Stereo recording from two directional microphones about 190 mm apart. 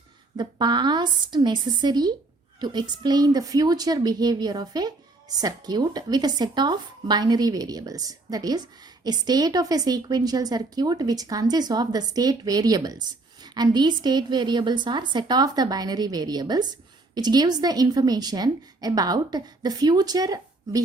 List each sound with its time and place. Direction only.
0.3 s a woman's voice: 25° right (ahead or behind)